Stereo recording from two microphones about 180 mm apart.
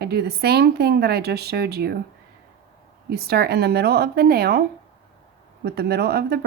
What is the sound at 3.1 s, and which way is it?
A woman's voice, 60° right (ahead or behind).